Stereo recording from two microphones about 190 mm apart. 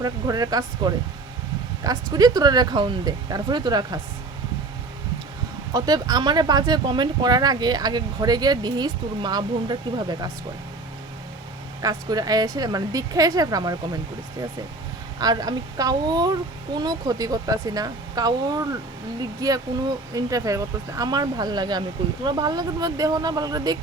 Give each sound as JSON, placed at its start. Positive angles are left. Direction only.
{"t": 0.0, "sound": "speech", "side_deg": -20}
{"t": 5.7, "sound": "speech", "side_deg": -20}
{"t": 11.8, "sound": "speech", "side_deg": -20}
{"t": 15.2, "sound": "speech", "side_deg": -20}